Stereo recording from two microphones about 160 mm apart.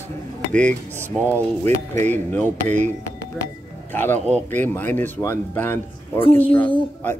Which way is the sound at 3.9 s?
10° left (ahead or behind).